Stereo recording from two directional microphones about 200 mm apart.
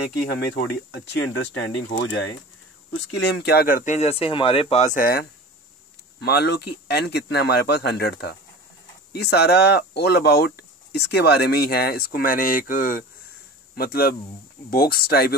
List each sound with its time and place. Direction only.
0.9 s speech: 60° left (ahead or behind)
6.2 s speech: 55° left (ahead or behind)